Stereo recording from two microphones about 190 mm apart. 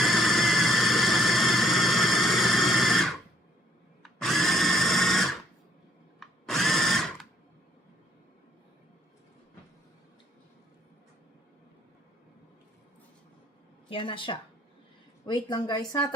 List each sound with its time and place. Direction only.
0.0 s vehicle: centre (ahead or behind)
4.0 s drill: centre (ahead or behind)
13.9 s speech: 25° left (ahead or behind)